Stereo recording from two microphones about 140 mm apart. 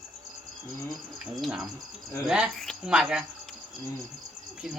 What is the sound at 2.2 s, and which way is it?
Speech, 5° right (ahead or behind).